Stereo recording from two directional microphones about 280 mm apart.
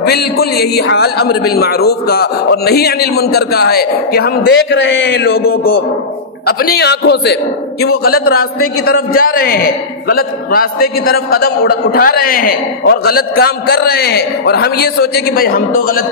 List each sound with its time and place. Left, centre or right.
0.0 s a man's voice: left